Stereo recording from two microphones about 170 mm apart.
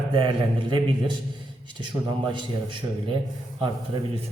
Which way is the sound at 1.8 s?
25° right (ahead or behind).